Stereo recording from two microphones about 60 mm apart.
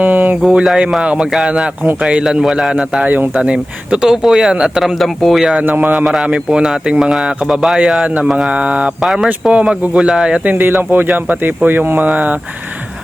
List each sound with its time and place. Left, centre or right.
0.0 s a sound: right
0.5 s speech: centre
1.0 s speech: centre
2.2 s speech: centre
4.1 s speech: centre
4.8 s speech: centre
5.6 s speech: right
6.2 s speech: centre
9.0 s speech: centre
9.5 s speech: centre
10.5 s speech: right